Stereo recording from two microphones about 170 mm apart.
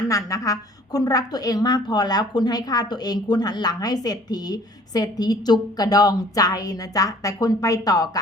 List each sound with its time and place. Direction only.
0.1 s a woman's voice: 20° left (ahead or behind)